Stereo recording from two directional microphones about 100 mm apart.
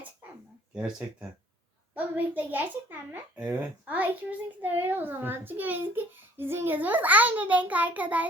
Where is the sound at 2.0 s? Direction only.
15° right (ahead or behind).